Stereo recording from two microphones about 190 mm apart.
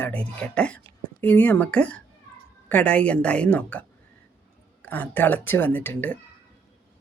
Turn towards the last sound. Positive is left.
turn(degrees=10)  # may be behind; listen again after turning